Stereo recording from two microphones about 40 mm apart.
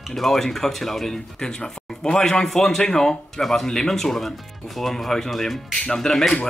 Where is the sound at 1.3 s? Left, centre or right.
Centre.